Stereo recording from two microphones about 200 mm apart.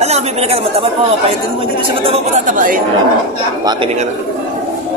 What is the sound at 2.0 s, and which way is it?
Speech, 35° right (ahead or behind).